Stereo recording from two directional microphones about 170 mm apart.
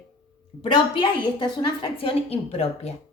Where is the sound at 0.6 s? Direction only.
30° left (ahead or behind).